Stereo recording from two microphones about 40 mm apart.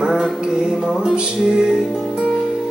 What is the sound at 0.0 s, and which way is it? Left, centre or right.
Mantra, centre.